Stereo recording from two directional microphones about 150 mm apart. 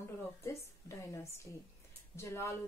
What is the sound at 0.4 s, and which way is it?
A woman's voice, 20° left (ahead or behind).